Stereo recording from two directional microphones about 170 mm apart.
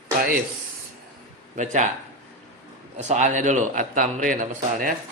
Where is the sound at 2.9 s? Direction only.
40° right (ahead or behind).